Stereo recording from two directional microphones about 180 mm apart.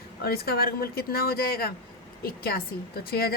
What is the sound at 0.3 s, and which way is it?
Speech, 60° left (ahead or behind).